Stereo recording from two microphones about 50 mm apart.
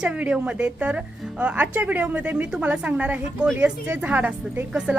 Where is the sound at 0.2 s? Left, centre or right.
Right.